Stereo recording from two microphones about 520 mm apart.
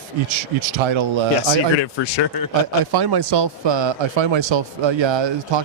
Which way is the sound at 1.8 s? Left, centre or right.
Left.